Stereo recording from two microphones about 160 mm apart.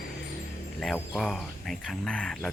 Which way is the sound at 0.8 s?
Centre (ahead or behind).